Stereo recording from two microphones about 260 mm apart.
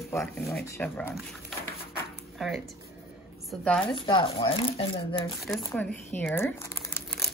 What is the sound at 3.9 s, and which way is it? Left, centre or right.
Speech, centre.